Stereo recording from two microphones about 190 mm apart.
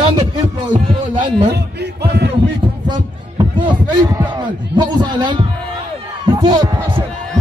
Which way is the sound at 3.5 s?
25° right (ahead or behind).